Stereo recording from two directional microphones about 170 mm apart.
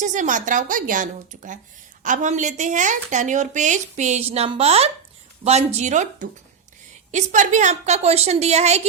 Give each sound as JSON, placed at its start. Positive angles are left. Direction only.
{"t": 0.0, "sound": "a woman's voice", "side_deg": -50}